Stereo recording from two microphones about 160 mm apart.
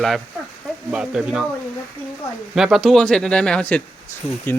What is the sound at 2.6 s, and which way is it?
Speech, centre (ahead or behind).